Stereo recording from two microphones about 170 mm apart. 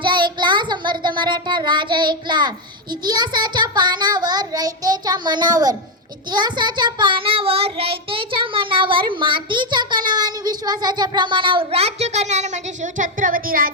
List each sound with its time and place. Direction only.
0.0 s child singing: 25° right (ahead or behind); by 13.7 s 55° right (ahead or behind)